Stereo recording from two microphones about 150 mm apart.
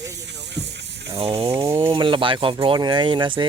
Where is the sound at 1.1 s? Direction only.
40° right (ahead or behind).